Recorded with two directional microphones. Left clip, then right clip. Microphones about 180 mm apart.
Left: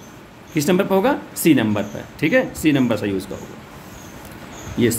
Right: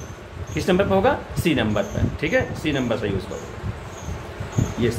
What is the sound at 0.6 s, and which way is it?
Speech, 40° left (ahead or behind).